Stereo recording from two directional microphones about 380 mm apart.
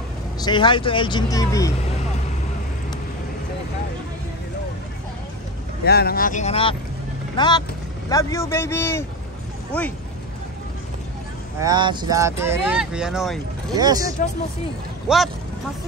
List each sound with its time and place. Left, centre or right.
0.4 s speech: centre
5.9 s speech: left; by 9.9 s centre
11.6 s speech: centre